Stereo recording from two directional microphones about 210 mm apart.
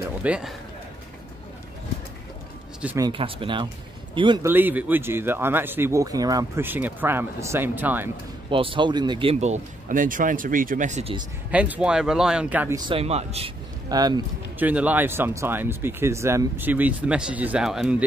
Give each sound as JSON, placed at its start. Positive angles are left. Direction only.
{"t": 0.2, "sound": "a man's voice", "side_deg": -5}
{"t": 2.8, "sound": "speech", "side_deg": -10}
{"t": 3.1, "sound": "speech", "side_deg": -25}
{"t": 4.5, "sound": "speech", "side_deg": -10}
{"t": 8.5, "sound": "speech", "side_deg": -25}
{"t": 11.5, "sound": "speech", "side_deg": -5}
{"t": 13.8, "sound": "speech", "side_deg": -20}
{"t": 14.7, "sound": "speech", "side_deg": -5}